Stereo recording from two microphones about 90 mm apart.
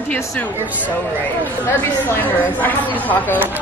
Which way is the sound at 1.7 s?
25° left (ahead or behind).